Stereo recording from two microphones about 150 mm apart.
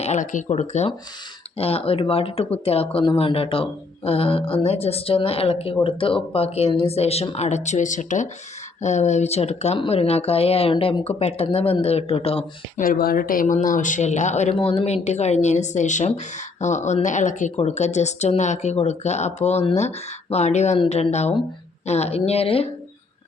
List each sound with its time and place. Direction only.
0.0 s speech: 50° left (ahead or behind)
12.8 s speech: 80° left; by 14.5 s 50° left (ahead or behind)
14.5 s speech: 40° left (ahead or behind)